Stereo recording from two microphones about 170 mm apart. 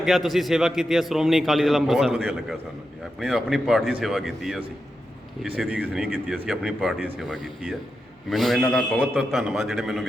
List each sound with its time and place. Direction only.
0.0 s a man's voice: centre (ahead or behind)